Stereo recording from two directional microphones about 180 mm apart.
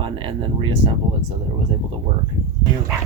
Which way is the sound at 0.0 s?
30° right (ahead or behind).